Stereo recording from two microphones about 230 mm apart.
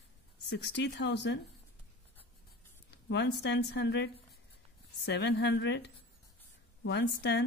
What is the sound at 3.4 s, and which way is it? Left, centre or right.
Speech, left.